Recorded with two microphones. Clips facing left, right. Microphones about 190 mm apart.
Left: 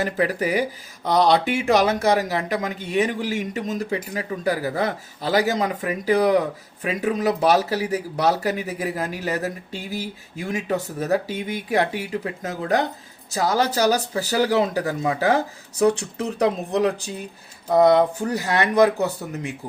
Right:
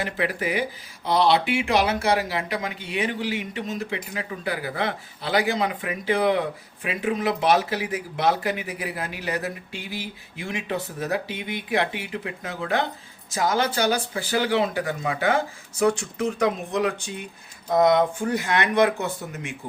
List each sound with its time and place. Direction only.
0.0 s speech: 40° left (ahead or behind)